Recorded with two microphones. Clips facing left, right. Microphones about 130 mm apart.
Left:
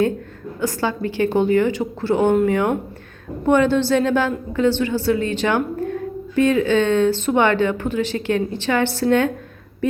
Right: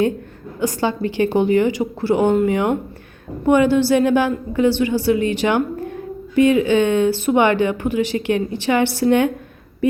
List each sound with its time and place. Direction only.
0.6 s a woman's voice: 15° right (ahead or behind)
3.4 s a woman's voice: 10° right (ahead or behind)